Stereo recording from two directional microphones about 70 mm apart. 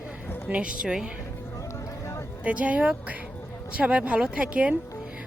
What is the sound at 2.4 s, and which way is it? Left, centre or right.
Speech, right.